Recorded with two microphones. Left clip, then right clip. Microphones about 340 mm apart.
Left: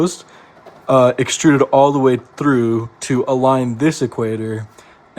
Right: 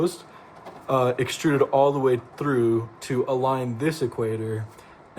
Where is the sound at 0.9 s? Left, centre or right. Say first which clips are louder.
Left 10 dB; left.